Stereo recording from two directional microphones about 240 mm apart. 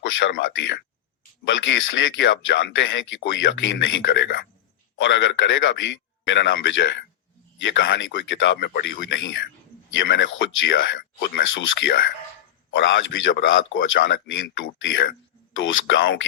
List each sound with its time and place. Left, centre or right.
0.0 s a man's voice: left
2.1 s a man's voice: left